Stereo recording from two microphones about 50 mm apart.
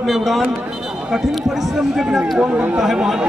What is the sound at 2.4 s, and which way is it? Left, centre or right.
Speech, right.